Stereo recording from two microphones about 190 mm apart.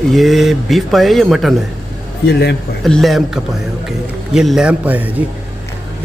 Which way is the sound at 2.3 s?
60° left (ahead or behind).